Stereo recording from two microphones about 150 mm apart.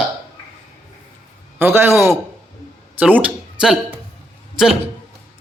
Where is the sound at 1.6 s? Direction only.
15° right (ahead or behind).